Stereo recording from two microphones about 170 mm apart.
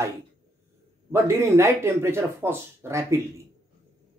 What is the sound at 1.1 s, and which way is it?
Speech, 15° right (ahead or behind).